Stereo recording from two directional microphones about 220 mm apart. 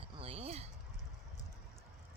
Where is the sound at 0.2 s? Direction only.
25° right (ahead or behind).